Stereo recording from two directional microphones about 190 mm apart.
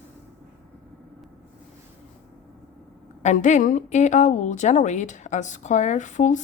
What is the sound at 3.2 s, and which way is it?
A woman's voice, 40° left (ahead or behind).